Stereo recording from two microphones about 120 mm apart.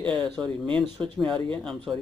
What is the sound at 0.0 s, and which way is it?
Speech, 10° left (ahead or behind).